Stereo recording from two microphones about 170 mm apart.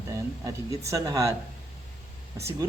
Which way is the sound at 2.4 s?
15° right (ahead or behind).